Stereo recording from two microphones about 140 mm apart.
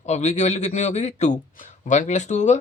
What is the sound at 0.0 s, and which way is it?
A man's voice, 55° left (ahead or behind).